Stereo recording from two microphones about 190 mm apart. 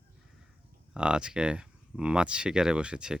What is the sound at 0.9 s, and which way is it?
Speech, 5° right (ahead or behind).